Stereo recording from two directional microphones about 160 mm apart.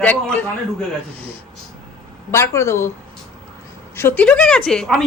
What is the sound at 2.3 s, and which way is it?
Speech, 15° left (ahead or behind).